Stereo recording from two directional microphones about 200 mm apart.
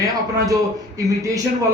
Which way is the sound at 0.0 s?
15° right (ahead or behind).